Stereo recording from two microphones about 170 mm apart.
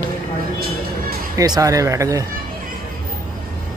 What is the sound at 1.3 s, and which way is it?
Speech, 20° right (ahead or behind).